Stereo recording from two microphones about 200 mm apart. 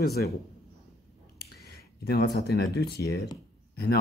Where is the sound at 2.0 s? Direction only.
55° left (ahead or behind).